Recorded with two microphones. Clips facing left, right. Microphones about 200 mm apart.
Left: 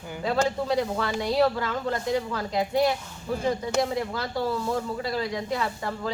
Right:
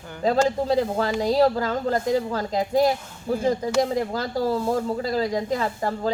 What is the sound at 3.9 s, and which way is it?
Speech, 35° right (ahead or behind).